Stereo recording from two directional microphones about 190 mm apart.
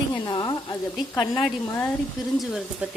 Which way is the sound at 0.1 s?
20° left (ahead or behind).